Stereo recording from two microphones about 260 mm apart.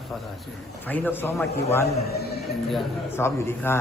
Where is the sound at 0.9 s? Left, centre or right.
Centre.